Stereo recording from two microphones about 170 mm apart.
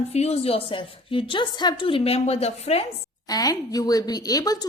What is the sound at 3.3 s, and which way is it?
A woman's voice, 20° left (ahead or behind).